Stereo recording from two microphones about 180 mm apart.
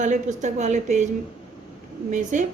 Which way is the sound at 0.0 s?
45° right (ahead or behind).